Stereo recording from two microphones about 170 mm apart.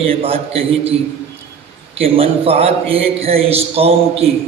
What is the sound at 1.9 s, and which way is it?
A man's voice, 35° right (ahead or behind).